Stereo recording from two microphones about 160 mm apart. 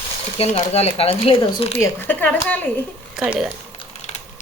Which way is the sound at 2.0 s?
10° left (ahead or behind).